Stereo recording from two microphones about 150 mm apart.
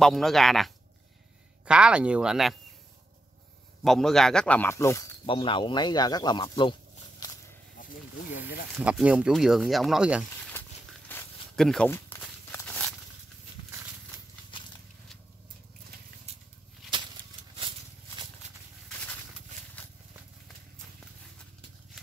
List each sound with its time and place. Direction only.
0.0 s speech: centre (ahead or behind)
3.8 s speech: centre (ahead or behind); by 5.0 s 20° left (ahead or behind)
5.2 s speech: 35° left (ahead or behind)
7.2 s a sound: 25° left (ahead or behind)
8.7 s speech: 5° right (ahead or behind)
11.1 s zipper: 15° left (ahead or behind)
11.5 s speech: 5° left (ahead or behind)
11.9 s walk: 15° left (ahead or behind)
14.5 s a sound: 35° left (ahead or behind)